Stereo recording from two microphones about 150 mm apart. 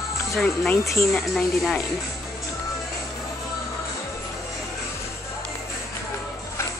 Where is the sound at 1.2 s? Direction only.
5° left (ahead or behind).